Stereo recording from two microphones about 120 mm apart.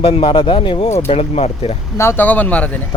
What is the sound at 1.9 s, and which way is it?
Speech, 20° left (ahead or behind).